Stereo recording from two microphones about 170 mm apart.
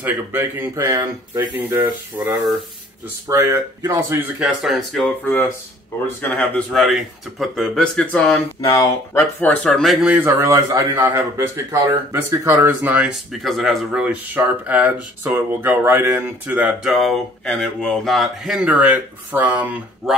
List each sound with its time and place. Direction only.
0.0 s speech: 10° right (ahead or behind)
6.2 s speech: 10° left (ahead or behind)
8.6 s speech: 20° left (ahead or behind); by 20.2 s 10° right (ahead or behind)